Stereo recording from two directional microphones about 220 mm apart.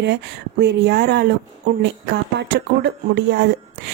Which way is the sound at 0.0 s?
50° right (ahead or behind).